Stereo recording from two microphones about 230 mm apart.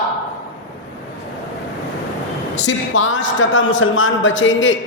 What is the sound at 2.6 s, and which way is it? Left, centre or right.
A man's voice, left.